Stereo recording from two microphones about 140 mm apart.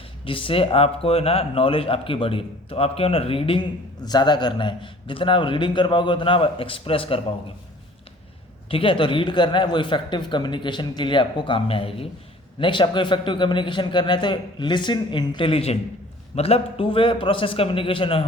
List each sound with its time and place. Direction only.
0.3 s a man's voice: 40° left (ahead or behind)
8.7 s a man's voice: 40° left (ahead or behind)